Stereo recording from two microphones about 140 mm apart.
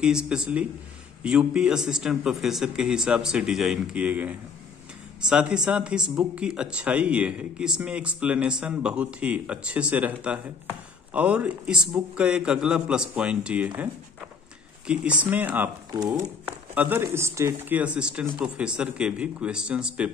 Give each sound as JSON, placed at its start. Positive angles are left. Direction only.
{"t": 0.0, "sound": "speech", "side_deg": -5}
{"t": 14.9, "sound": "speech", "side_deg": -10}
{"t": 16.0, "sound": "speech", "side_deg": -30}
{"t": 16.4, "sound": "a sound", "side_deg": -10}
{"t": 17.0, "sound": "speech", "side_deg": -20}